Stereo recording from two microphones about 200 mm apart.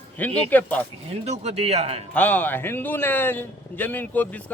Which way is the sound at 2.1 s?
10° left (ahead or behind).